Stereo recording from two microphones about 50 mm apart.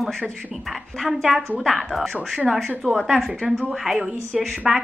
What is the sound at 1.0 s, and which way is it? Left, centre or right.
A woman's voice, centre.